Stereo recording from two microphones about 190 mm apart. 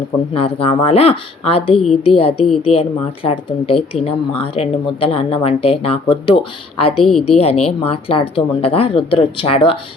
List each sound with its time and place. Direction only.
0.3 s speech: 30° left (ahead or behind)